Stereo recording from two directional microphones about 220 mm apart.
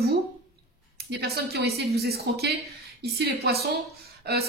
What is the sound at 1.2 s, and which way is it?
Speech, 45° right (ahead or behind).